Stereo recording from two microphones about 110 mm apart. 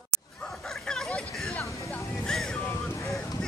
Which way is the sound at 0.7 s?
5° left (ahead or behind).